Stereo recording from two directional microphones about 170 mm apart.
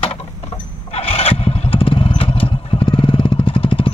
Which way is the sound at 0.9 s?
35° left (ahead or behind).